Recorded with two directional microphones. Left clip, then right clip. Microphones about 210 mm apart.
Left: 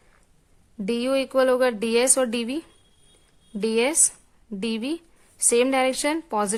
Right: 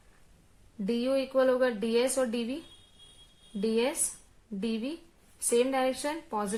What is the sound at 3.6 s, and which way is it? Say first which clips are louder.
A woman's voice: left 7 dB; 35° left (ahead or behind).